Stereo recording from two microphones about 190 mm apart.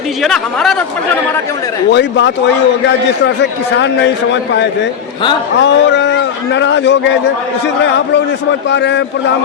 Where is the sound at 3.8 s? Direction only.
70° left (ahead or behind).